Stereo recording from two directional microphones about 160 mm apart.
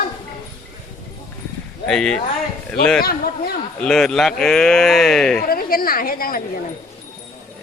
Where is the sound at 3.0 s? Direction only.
70° left (ahead or behind).